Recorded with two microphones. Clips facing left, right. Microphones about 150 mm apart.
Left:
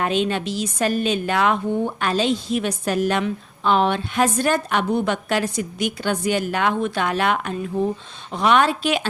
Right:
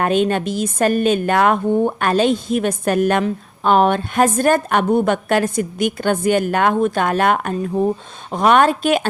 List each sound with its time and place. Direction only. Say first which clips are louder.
0.0 s a woman's voice: right 5 dB; 50° right (ahead or behind)